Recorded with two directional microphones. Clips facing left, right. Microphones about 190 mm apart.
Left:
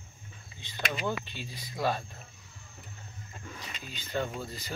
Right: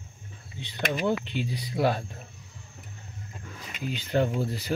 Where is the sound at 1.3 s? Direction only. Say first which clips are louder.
Right 9 dB; 70° right (ahead or behind).